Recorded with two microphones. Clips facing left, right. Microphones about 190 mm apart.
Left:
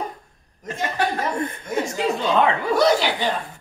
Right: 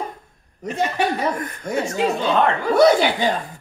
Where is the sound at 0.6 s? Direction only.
70° right (ahead or behind).